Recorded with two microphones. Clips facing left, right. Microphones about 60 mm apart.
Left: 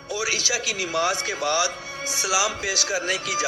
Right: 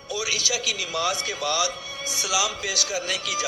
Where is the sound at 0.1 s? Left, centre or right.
Left.